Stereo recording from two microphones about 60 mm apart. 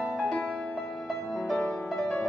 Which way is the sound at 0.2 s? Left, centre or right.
Centre.